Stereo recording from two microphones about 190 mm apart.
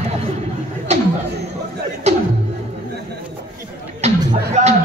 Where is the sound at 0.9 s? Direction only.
35° right (ahead or behind).